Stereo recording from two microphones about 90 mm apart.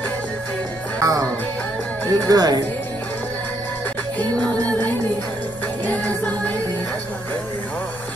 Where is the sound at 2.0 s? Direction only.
45° right (ahead or behind).